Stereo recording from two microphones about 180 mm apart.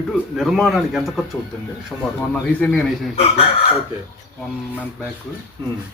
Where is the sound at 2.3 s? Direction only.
10° left (ahead or behind).